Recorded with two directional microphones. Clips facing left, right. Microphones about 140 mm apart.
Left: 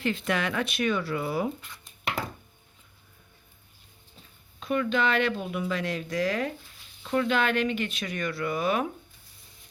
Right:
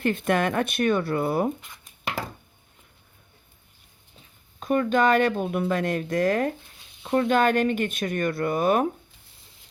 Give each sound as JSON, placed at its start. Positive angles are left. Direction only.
{"t": 0.0, "sound": "speech", "side_deg": -50}
{"t": 4.6, "sound": "speech", "side_deg": -45}